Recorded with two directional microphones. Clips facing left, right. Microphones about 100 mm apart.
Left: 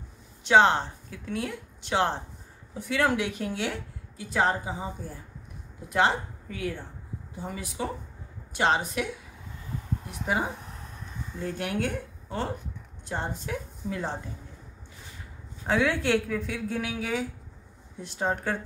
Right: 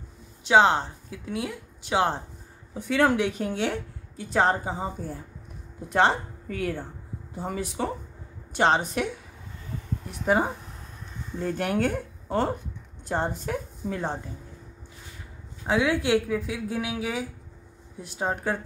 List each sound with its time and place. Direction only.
0.5 s a woman's voice: 10° right (ahead or behind)
2.7 s a woman's voice: 25° right (ahead or behind)
6.5 s a woman's voice: 45° right (ahead or behind)
11.5 s a woman's voice: 45° right (ahead or behind)
15.6 s a woman's voice: 10° right (ahead or behind)